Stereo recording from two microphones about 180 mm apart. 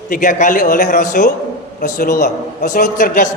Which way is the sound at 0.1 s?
45° left (ahead or behind).